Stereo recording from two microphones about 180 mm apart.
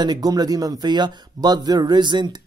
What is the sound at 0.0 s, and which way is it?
Speech, 20° right (ahead or behind).